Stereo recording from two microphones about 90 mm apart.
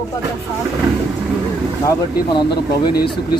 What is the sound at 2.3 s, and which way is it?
Speech, 50° left (ahead or behind).